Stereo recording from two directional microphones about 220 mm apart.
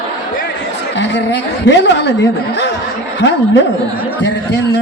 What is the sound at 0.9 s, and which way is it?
A woman's voice, 55° left (ahead or behind).